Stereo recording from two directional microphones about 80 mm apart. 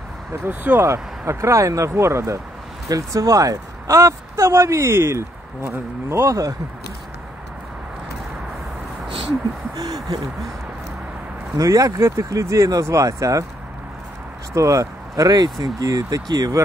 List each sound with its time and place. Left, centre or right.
0.5 s speech: right
0.8 s speech: right
9.8 s speech: right
11.5 s speech: right
14.5 s speech: right
15.6 s speech: right